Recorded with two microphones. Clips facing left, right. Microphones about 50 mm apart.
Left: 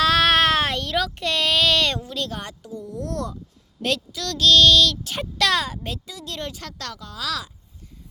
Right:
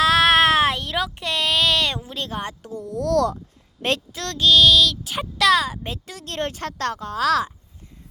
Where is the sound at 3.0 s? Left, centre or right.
Right.